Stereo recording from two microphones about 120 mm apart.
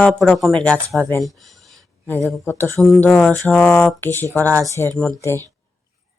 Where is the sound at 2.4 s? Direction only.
15° left (ahead or behind).